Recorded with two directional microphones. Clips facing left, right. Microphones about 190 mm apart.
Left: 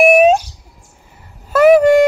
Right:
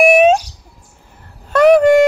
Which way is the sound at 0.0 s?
Centre (ahead or behind).